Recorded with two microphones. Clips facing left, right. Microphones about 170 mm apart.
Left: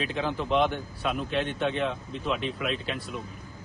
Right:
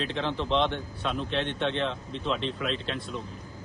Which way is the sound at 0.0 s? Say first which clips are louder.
Even; 5° left (ahead or behind).